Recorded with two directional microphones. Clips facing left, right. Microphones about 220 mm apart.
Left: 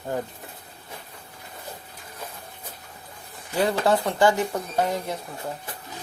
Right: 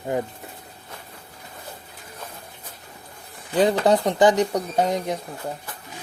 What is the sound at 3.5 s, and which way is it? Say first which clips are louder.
Speech: right 4 dB; 20° right (ahead or behind).